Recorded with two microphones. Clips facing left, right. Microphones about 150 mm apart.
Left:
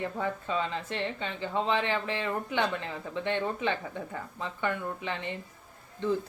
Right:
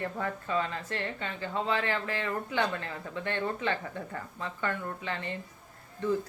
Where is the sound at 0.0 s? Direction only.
15° left (ahead or behind).